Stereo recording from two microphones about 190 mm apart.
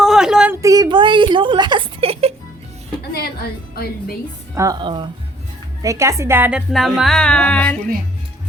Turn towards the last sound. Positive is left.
turn(degrees=5)  # may be behind; listen again after turning